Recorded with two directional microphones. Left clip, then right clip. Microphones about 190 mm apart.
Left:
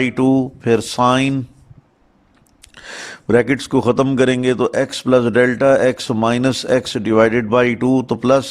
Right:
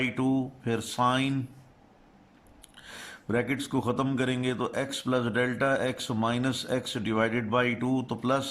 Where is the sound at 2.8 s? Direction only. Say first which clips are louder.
Left 15 dB; 35° left (ahead or behind).